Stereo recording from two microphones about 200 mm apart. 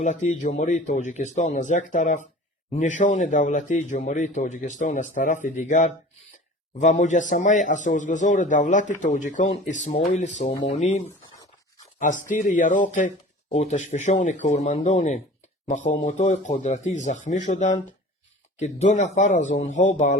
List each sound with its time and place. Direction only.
0.0 s speech: 35° left (ahead or behind)
12.3 s speech: 40° left (ahead or behind)